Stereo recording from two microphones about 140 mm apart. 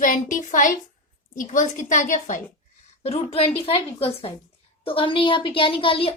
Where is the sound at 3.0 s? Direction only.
45° left (ahead or behind).